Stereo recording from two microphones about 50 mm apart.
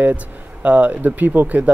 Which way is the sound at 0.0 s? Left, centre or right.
Right.